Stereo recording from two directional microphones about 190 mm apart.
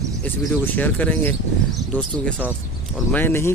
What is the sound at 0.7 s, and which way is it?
Speech, 10° left (ahead or behind).